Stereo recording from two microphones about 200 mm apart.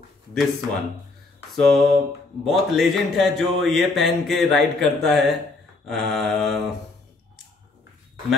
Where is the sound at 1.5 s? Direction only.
Centre (ahead or behind).